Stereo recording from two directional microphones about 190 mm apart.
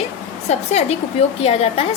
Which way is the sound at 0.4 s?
35° left (ahead or behind).